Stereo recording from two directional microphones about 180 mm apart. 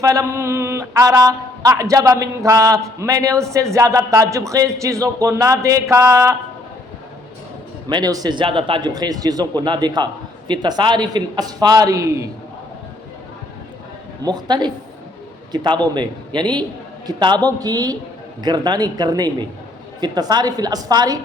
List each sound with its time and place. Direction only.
0.0 s speech: 20° right (ahead or behind)
7.9 s a man's voice: 25° right (ahead or behind)
14.3 s a man's voice: 25° right (ahead or behind)